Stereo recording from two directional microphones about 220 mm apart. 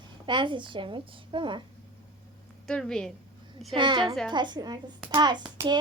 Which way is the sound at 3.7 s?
20° right (ahead or behind).